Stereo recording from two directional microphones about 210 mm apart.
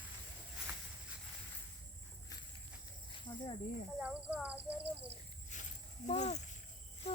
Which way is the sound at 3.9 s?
5° right (ahead or behind).